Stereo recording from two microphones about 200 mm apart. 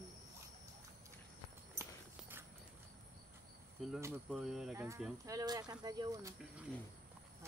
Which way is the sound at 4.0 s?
10° right (ahead or behind).